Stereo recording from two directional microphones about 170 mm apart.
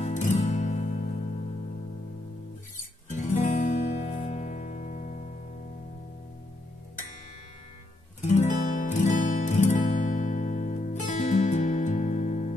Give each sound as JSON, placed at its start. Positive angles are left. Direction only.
{"t": 0.0, "sound": "music", "side_deg": 45}
{"t": 3.1, "sound": "music", "side_deg": 45}
{"t": 8.2, "sound": "guitar", "side_deg": 45}